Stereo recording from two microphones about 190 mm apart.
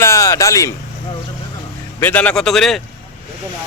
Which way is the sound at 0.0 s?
15° left (ahead or behind).